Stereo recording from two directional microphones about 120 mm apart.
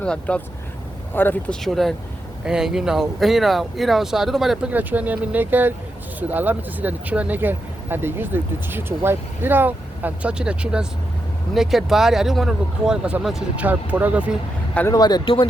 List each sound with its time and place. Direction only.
0.0 s speech: 10° left (ahead or behind)
1.6 s speech: centre (ahead or behind)
14.9 s speech: 35° left (ahead or behind)